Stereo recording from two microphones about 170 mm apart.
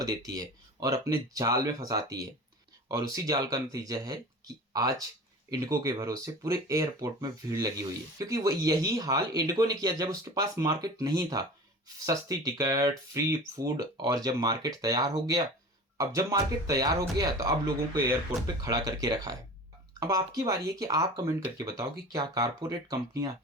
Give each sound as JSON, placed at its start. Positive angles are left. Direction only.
{"t": 0.3, "sound": "speech", "side_deg": -20}
{"t": 3.0, "sound": "speech", "side_deg": -20}